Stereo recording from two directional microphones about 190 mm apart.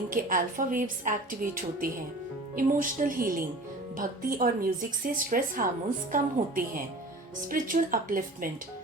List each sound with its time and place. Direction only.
0.1 s speech: 45° right (ahead or behind)